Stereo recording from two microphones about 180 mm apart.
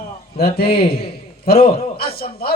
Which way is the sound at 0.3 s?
60° left (ahead or behind).